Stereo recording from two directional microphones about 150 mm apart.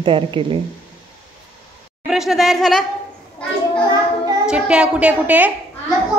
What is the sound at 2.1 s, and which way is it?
Speech, centre (ahead or behind).